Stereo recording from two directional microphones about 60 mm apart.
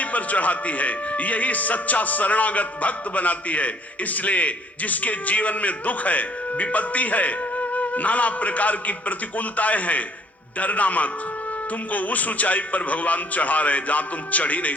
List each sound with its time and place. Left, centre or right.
0.0 s a man's voice: left